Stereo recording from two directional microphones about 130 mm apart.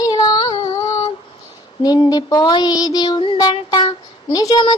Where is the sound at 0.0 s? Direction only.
30° left (ahead or behind).